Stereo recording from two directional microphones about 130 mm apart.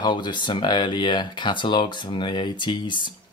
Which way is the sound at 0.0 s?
35° left (ahead or behind).